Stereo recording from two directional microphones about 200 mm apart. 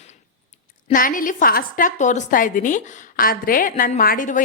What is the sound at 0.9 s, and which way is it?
A woman's voice, 45° left (ahead or behind).